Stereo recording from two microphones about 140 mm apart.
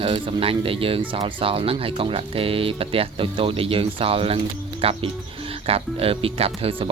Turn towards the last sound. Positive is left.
turn(degrees=-45)  # may be behind; listen again after turning